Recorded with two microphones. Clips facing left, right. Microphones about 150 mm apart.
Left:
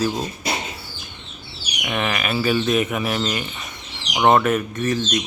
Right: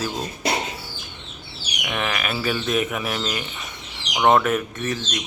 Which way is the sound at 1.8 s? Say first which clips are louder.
Left 2 dB; centre (ahead or behind).